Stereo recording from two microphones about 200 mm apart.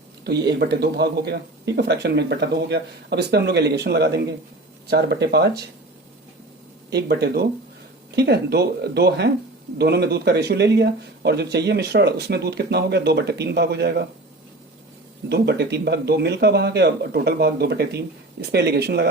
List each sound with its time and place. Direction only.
0.3 s speech: 55° right (ahead or behind)
6.9 s speech: 55° right (ahead or behind)
15.3 s speech: 55° right (ahead or behind)